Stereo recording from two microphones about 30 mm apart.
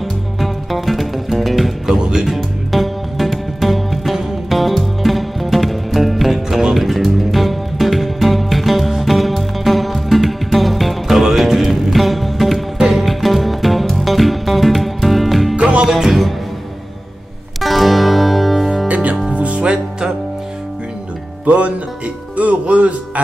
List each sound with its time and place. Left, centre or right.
0.4 s music: centre
1.9 s music: centre
2.2 s music: centre
15.5 s music: right
17.6 s music: centre
19.3 s music: right
21.5 s music: right